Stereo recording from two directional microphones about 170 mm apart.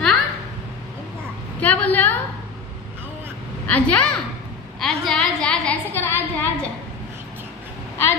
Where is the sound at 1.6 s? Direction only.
10° left (ahead or behind).